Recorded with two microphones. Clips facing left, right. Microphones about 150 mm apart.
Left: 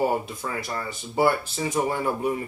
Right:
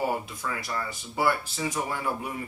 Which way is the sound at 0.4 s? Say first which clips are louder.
Left 2 dB; 30° left (ahead or behind).